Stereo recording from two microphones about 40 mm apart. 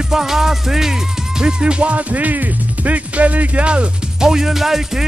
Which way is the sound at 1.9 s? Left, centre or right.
Right.